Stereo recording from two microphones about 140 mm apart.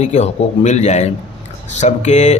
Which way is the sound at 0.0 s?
55° left (ahead or behind).